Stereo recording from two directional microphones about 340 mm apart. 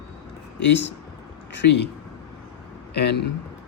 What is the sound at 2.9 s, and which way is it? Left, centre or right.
Speech, left.